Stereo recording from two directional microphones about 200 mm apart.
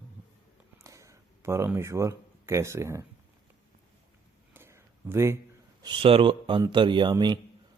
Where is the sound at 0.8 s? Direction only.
15° right (ahead or behind).